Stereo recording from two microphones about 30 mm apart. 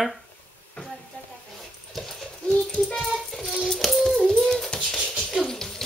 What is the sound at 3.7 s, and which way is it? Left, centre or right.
Music, centre.